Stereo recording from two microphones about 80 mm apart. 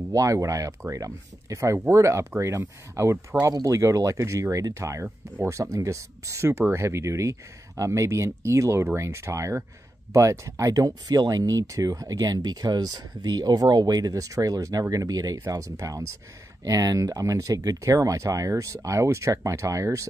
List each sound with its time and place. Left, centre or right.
0.1 s speech: right
5.0 s speech: right
5.6 s speech: right